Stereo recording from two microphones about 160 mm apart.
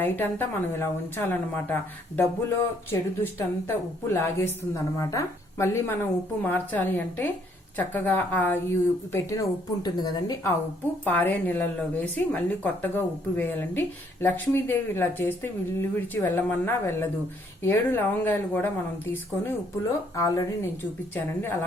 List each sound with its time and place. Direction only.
0.0 s a woman's voice: 10° left (ahead or behind)
11.0 s a woman's voice: 10° left (ahead or behind)